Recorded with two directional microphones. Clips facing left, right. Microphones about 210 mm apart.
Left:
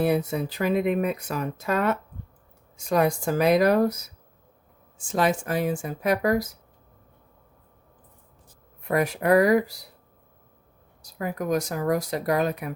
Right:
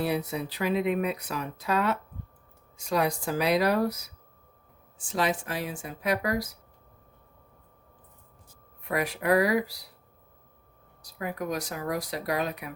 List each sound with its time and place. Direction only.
0.0 s speech: 50° left (ahead or behind)
4.9 s speech: 50° left (ahead or behind)
8.9 s speech: 45° left (ahead or behind)
11.2 s speech: 45° left (ahead or behind)